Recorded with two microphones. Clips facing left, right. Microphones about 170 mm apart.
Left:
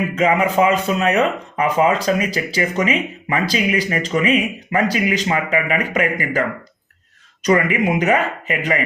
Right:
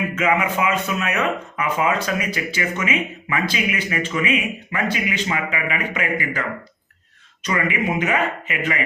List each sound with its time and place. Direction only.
0.2 s speech: 35° left (ahead or behind)
7.4 s speech: 40° left (ahead or behind)